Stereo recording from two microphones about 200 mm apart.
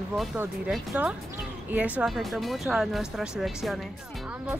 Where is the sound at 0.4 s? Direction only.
5° right (ahead or behind).